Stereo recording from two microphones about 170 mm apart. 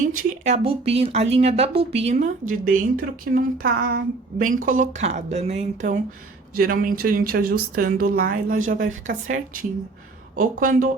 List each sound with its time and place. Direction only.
0.0 s speech: 50° right (ahead or behind)
6.6 s a woman's voice: 60° right (ahead or behind)
10.3 s speech: 50° right (ahead or behind)